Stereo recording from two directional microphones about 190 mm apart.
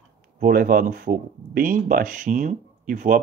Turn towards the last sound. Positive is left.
turn(degrees=-45)  # may be behind; listen again after turning